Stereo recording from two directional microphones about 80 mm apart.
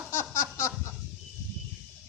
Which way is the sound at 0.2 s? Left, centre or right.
Left.